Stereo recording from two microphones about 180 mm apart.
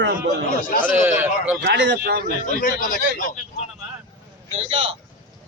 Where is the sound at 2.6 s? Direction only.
50° left (ahead or behind).